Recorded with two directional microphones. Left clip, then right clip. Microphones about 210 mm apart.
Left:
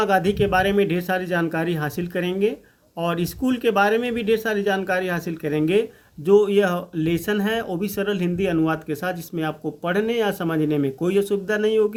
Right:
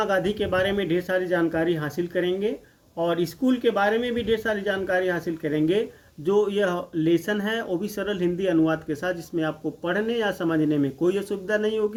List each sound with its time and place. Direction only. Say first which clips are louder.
0.0 s speech: left 4 dB; 35° left (ahead or behind)